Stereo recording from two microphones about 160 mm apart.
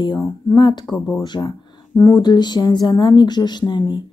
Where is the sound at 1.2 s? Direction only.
25° left (ahead or behind).